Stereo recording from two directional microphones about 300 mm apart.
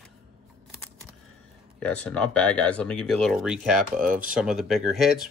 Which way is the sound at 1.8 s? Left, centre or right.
Centre.